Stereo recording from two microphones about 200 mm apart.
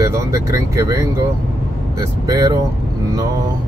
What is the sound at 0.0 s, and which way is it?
Speech, 15° right (ahead or behind).